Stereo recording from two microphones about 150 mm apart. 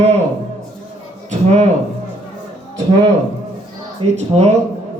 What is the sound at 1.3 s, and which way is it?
Speech, 50° right (ahead or behind).